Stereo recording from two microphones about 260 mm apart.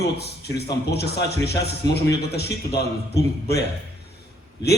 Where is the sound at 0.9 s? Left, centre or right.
Left.